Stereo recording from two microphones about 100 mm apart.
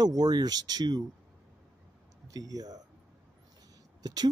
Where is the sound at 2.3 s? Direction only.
40° right (ahead or behind).